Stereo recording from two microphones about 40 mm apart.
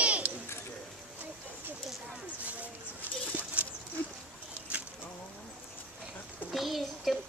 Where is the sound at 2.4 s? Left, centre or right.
Right.